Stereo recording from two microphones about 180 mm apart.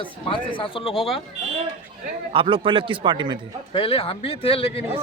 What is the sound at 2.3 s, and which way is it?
Speech, 30° right (ahead or behind).